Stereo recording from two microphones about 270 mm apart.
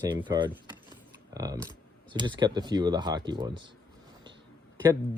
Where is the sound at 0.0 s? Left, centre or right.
Centre.